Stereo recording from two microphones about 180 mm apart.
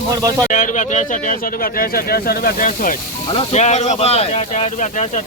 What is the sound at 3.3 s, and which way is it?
Speech, 35° left (ahead or behind).